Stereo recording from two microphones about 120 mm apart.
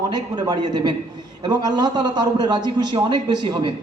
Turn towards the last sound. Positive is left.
turn(degrees=-40)  # may be behind; listen again after turning